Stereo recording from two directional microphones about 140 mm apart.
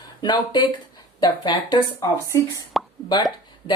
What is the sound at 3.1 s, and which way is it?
Speech, 30° left (ahead or behind).